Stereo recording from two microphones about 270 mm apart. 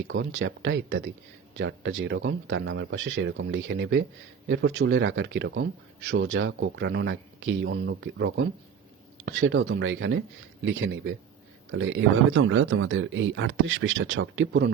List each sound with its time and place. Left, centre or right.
0.0 s a man's voice: right